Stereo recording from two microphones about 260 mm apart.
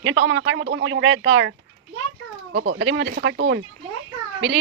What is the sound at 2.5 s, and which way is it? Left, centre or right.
Speech, right.